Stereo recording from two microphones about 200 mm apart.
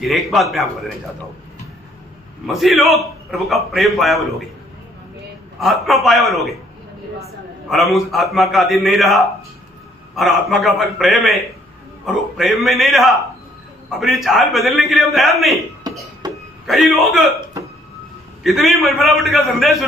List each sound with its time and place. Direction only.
0.0 s a man's voice: centre (ahead or behind)
2.5 s a man's voice: centre (ahead or behind)
5.5 s a man's voice: centre (ahead or behind)
7.7 s a man's voice: centre (ahead or behind)
15.9 s a sound: 20° right (ahead or behind)
16.6 s a man's voice: centre (ahead or behind)
18.4 s a man's voice: centre (ahead or behind)